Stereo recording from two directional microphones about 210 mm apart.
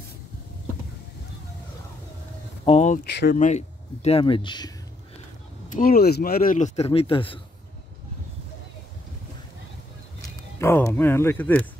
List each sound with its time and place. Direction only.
2.6 s a sound: 30° left (ahead or behind)
3.1 s speech: 55° left (ahead or behind)
3.3 s speech: 35° left (ahead or behind)
5.7 s speech: 40° left (ahead or behind); by 7.3 s 25° left (ahead or behind)
10.6 s speech: 10° left (ahead or behind)